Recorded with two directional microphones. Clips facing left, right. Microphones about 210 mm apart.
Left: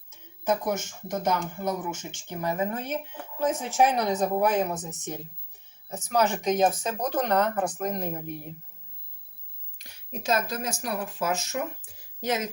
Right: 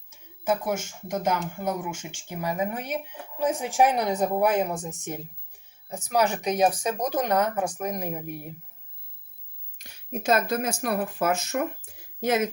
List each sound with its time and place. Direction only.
0.1 s speech: 10° right (ahead or behind)
9.7 s speech: 55° right (ahead or behind)